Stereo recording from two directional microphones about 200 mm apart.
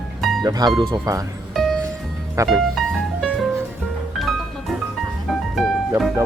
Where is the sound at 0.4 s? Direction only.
20° right (ahead or behind).